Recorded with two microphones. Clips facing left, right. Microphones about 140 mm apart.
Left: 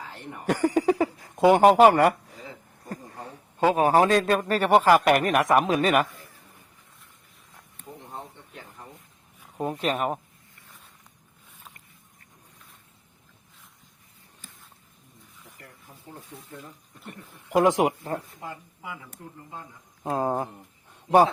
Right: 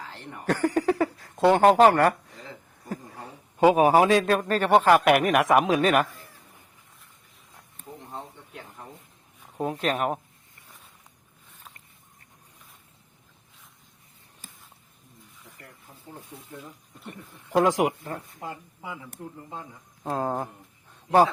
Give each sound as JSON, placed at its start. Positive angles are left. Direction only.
{"t": 0.1, "sound": "speech", "side_deg": 10}
{"t": 3.2, "sound": "a man's voice", "side_deg": -15}
{"t": 9.4, "sound": "speech", "side_deg": 0}
{"t": 17.0, "sound": "a man's voice", "side_deg": 0}
{"t": 17.6, "sound": "speech", "side_deg": 25}
{"t": 18.3, "sound": "a woman's voice", "side_deg": -20}
{"t": 20.0, "sound": "speech", "side_deg": 10}